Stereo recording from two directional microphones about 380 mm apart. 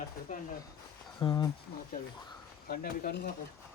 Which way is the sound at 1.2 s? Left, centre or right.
Centre.